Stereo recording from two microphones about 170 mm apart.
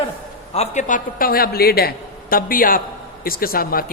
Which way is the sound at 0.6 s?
45° left (ahead or behind).